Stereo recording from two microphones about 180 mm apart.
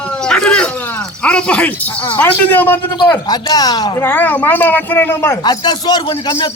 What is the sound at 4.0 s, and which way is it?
A man's voice, 10° left (ahead or behind).